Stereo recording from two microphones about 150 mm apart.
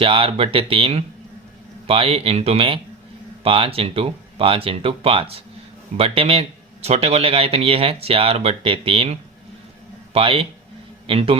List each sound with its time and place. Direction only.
0.0 s speech: 40° right (ahead or behind)
10.2 s a man's voice: 40° right (ahead or behind)